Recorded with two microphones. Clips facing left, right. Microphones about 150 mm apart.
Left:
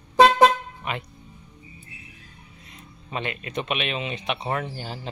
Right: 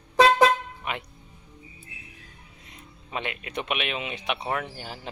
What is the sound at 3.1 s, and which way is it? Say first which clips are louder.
Speech: left 2 dB; 10° right (ahead or behind).